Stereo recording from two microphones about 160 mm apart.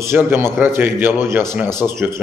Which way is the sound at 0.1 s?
15° right (ahead or behind).